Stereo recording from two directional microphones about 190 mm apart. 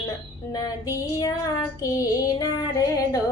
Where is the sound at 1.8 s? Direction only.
20° left (ahead or behind).